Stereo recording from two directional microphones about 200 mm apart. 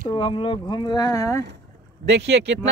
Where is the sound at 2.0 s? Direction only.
60° right (ahead or behind).